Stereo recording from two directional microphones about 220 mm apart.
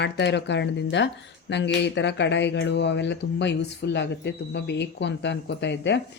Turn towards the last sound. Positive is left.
turn(degrees=55)  # may be behind; listen again after turning